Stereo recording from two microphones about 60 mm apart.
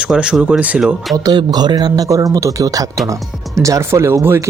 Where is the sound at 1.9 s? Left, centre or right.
Right.